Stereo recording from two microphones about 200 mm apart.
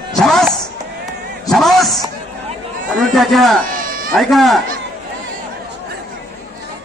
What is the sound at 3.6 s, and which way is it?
Cat, 45° right (ahead or behind).